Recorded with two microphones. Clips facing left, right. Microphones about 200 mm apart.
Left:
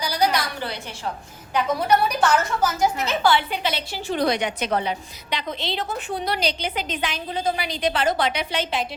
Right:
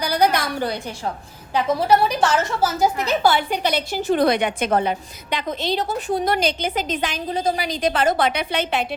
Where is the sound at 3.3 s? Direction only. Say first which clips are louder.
Right 2 dB; 45° right (ahead or behind); by 8.8 s 60° right (ahead or behind).